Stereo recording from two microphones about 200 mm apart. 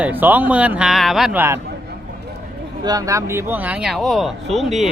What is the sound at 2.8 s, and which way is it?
Speech, 20° right (ahead or behind).